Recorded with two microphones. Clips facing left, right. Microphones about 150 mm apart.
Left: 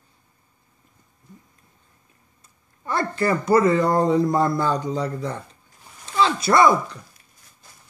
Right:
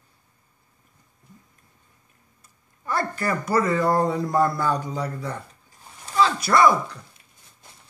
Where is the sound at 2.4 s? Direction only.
25° left (ahead or behind).